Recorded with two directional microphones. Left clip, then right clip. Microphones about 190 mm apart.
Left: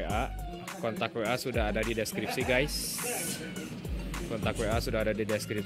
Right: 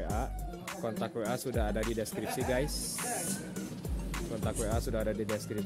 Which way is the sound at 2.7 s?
35° right (ahead or behind).